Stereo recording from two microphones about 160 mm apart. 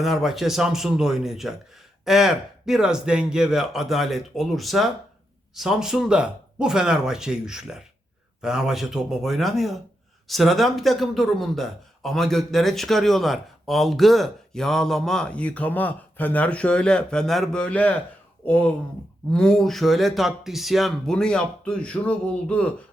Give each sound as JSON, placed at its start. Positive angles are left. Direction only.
{"t": 0.0, "sound": "a man's voice", "side_deg": 0}